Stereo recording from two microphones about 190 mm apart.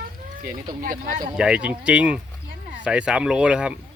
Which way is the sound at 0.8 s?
45° right (ahead or behind).